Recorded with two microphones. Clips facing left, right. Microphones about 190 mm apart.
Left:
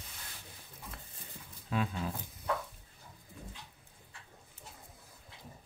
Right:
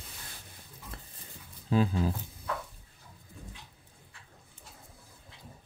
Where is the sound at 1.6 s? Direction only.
30° right (ahead or behind).